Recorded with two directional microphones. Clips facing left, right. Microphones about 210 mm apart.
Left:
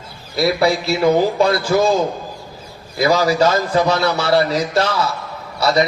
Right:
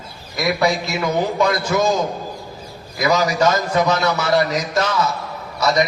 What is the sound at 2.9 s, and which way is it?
A man's voice, 30° left (ahead or behind).